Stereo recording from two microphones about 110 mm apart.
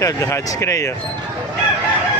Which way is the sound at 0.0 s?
25° left (ahead or behind).